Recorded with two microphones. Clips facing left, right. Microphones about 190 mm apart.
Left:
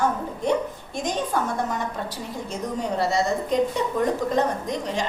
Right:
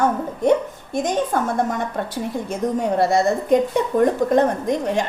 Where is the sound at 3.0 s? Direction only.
50° right (ahead or behind).